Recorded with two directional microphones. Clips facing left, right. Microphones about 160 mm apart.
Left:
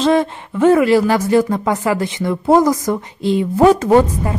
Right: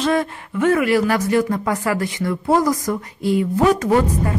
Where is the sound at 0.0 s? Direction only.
25° left (ahead or behind).